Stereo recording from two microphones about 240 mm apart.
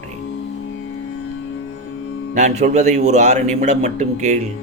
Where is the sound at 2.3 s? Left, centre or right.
Right.